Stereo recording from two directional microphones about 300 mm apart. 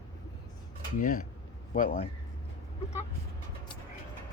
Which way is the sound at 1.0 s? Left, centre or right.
Left.